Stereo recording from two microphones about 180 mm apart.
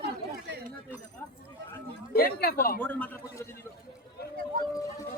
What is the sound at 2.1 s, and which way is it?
Speech, 55° left (ahead or behind).